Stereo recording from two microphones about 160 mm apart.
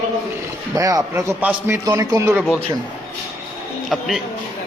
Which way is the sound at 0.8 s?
20° right (ahead or behind).